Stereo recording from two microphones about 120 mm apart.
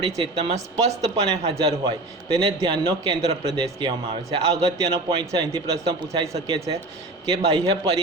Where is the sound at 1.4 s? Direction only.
55° right (ahead or behind).